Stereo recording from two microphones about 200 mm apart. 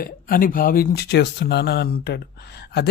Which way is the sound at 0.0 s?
45° left (ahead or behind).